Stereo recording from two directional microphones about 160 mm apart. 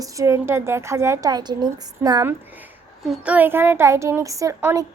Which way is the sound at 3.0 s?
5° right (ahead or behind).